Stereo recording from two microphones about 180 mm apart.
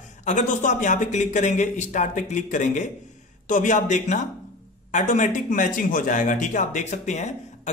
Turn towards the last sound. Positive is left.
turn(degrees=40)  # may be behind; listen again after turning